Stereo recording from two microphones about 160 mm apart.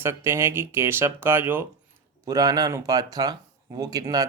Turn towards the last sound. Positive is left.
turn(degrees=-25)  # may be behind; listen again after turning